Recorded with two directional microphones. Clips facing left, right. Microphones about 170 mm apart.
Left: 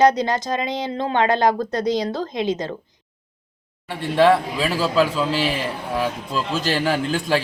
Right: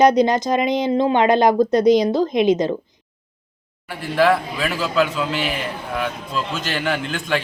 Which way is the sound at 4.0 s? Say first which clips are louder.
Left 1 dB; 25° left (ahead or behind).